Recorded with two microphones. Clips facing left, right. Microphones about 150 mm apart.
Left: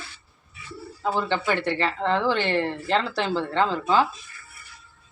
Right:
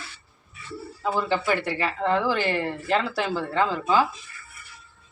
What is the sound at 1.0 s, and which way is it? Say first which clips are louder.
A woman's voice: even; centre (ahead or behind).